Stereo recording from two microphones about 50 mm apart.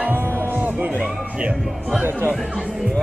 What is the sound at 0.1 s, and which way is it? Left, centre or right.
Music, right.